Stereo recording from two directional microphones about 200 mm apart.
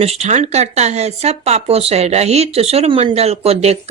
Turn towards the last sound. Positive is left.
turn(degrees=-30)  # may be behind; listen again after turning